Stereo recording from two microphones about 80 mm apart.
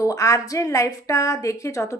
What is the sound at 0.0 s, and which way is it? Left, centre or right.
A woman's voice, left.